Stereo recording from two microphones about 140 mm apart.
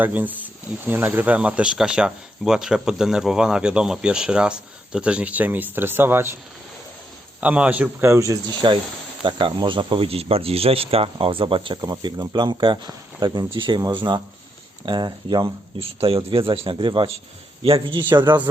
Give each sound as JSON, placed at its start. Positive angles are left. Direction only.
{"t": 0.0, "sound": "speech", "side_deg": -10}
{"t": 7.4, "sound": "speech", "side_deg": -10}
{"t": 8.6, "sound": "speech", "side_deg": -30}